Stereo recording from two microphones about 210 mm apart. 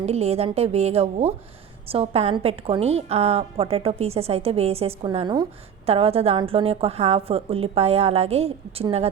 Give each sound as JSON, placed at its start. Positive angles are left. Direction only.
{"t": 0.0, "sound": "a woman's voice", "side_deg": -30}